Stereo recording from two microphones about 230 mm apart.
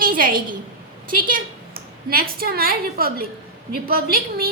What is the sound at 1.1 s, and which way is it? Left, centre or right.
A woman's voice, right.